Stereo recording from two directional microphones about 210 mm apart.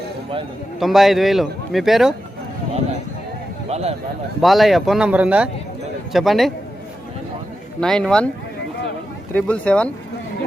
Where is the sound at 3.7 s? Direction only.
30° right (ahead or behind).